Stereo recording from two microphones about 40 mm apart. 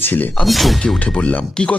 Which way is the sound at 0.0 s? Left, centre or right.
Left.